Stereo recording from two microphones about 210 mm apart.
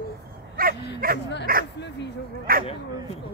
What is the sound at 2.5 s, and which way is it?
Speech, 45° right (ahead or behind).